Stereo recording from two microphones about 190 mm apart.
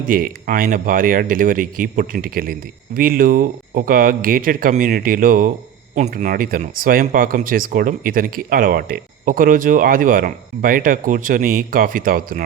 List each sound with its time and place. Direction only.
0.1 s speech: 50° right (ahead or behind)